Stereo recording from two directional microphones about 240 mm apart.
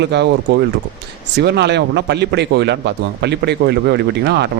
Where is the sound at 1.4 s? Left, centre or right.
Right.